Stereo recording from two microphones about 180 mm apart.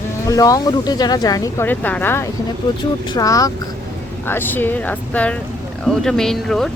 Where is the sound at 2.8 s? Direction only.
25° left (ahead or behind).